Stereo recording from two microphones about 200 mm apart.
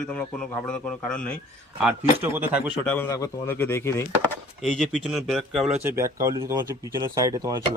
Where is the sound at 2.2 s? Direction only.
10° right (ahead or behind).